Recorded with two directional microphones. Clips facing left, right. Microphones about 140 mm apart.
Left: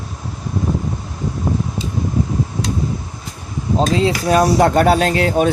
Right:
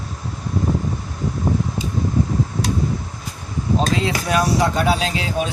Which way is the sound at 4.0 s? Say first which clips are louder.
Left 5 dB; 30° left (ahead or behind).